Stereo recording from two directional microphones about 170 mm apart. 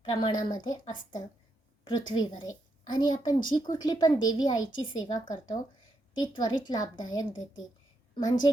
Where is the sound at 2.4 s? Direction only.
25° left (ahead or behind).